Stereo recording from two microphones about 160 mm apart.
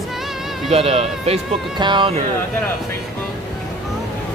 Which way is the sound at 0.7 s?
40° right (ahead or behind).